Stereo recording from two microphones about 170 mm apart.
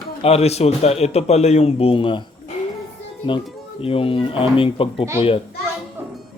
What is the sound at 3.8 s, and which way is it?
Speech, 35° left (ahead or behind).